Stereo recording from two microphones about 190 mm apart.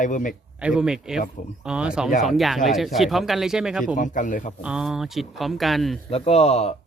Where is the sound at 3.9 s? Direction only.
40° left (ahead or behind).